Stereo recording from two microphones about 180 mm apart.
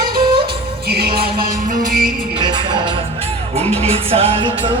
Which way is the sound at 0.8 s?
60° right (ahead or behind).